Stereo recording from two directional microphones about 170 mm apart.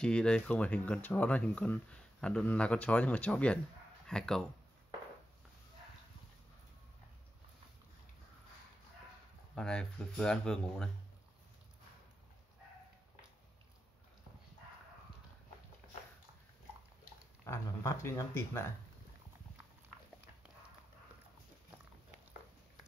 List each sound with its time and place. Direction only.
0.0 s speech: 5° left (ahead or behind)
9.6 s speech: 5° left (ahead or behind)
17.5 s speech: 15° left (ahead or behind)